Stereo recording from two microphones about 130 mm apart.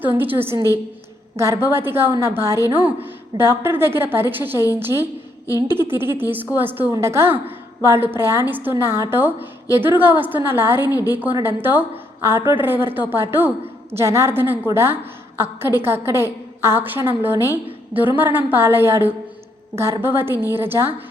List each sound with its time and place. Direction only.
0.0 s a woman's voice: 15° right (ahead or behind)